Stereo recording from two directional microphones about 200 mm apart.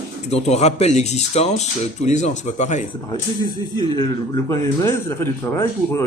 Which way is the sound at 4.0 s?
15° left (ahead or behind).